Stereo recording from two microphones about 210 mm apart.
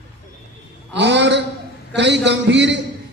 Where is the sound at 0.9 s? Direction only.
55° right (ahead or behind).